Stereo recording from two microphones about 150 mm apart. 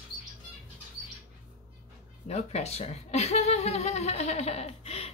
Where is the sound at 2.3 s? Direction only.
45° left (ahead or behind).